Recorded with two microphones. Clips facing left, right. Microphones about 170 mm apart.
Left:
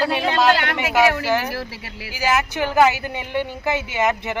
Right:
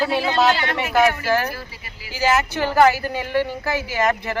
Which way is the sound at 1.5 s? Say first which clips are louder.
Left 4 dB; 85° left.